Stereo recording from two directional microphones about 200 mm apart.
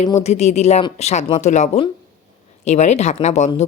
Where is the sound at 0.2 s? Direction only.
35° left (ahead or behind).